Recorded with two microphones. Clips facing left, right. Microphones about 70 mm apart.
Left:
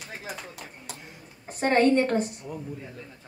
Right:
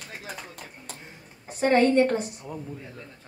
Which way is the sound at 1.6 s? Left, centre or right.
Left.